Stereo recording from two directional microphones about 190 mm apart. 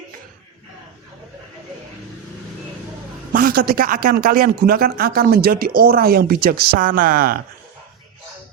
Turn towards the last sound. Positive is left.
turn(degrees=-50)  # may be behind; listen again after turning